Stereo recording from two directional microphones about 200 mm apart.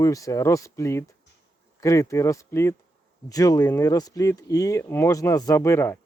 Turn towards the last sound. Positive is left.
turn(degrees=10)  # may be behind; listen again after turning